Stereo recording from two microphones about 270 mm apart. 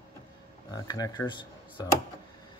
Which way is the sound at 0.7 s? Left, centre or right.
Centre.